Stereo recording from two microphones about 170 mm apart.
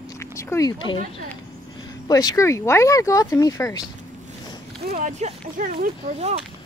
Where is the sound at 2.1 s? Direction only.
20° left (ahead or behind).